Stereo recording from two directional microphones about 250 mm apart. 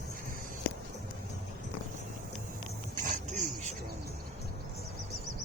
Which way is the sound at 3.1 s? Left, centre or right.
Right.